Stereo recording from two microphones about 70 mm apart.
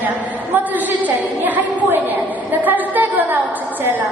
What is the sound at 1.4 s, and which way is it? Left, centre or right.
A woman's voice, right.